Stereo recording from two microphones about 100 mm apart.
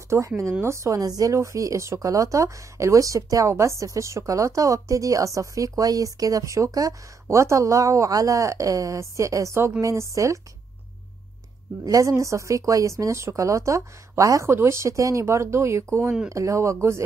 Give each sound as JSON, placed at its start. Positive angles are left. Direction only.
{"t": 0.4, "sound": "speech", "side_deg": -30}
{"t": 11.8, "sound": "speech", "side_deg": -35}